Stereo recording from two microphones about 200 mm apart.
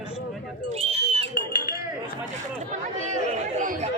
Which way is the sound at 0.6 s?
30° right (ahead or behind).